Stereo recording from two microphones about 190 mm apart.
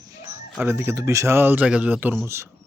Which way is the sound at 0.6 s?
10° right (ahead or behind).